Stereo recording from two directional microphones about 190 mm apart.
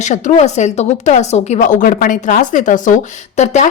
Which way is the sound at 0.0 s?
40° left (ahead or behind).